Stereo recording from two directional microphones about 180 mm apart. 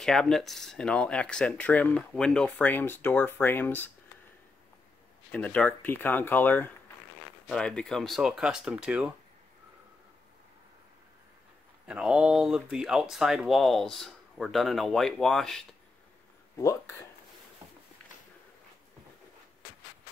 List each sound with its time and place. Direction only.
0.0 s speech: centre (ahead or behind)
5.3 s speech: 5° left (ahead or behind)
11.9 s speech: 5° right (ahead or behind)
16.5 s speech: 15° left (ahead or behind)